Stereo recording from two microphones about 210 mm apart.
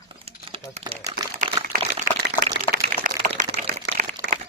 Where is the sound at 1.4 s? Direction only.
40° right (ahead or behind).